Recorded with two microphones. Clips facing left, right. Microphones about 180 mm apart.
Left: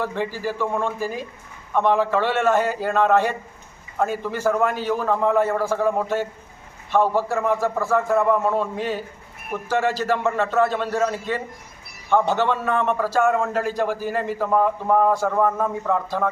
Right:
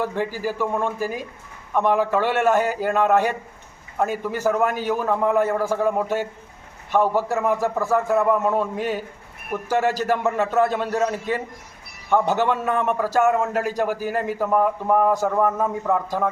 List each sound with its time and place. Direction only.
0.0 s a man's voice: 10° right (ahead or behind)
15.1 s a man's voice: 20° right (ahead or behind)
15.4 s a man's voice: 5° right (ahead or behind)